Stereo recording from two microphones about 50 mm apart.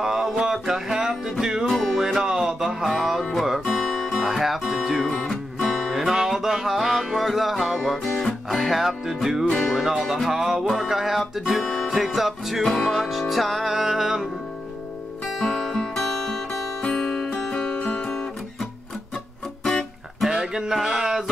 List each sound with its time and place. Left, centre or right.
0.0 s music: centre
1.7 s music: centre
5.1 s music: centre
5.6 s music: centre
15.4 s guitar: centre
16.8 s music: left
17.8 s guitar: left
19.6 s music: centre
20.2 s music: centre